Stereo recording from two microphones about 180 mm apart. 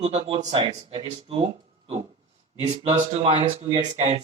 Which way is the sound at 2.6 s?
30° right (ahead or behind).